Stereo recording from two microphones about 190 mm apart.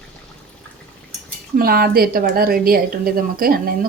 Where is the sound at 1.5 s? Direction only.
50° right (ahead or behind).